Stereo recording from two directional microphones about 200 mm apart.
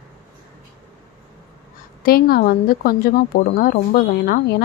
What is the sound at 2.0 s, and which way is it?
A woman's voice, 50° left (ahead or behind).